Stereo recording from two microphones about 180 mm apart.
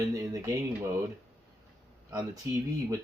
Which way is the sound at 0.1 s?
15° right (ahead or behind).